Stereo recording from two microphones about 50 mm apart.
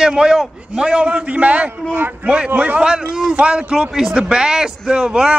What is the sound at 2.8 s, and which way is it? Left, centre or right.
Speech, centre.